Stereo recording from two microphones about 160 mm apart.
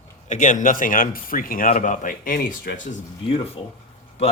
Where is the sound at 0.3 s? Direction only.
50° left (ahead or behind).